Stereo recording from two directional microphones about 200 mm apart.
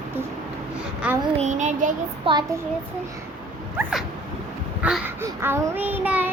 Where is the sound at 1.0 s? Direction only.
5° right (ahead or behind).